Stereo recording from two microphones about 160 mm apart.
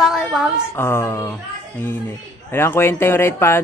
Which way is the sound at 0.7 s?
15° left (ahead or behind).